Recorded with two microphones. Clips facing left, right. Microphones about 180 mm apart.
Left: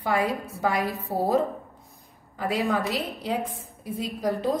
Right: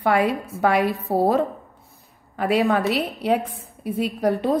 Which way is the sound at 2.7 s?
70° right (ahead or behind).